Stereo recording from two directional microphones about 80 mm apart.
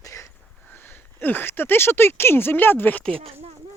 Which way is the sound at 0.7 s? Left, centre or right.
Left.